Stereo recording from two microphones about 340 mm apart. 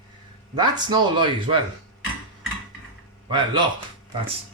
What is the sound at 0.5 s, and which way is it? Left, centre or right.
Speech, centre.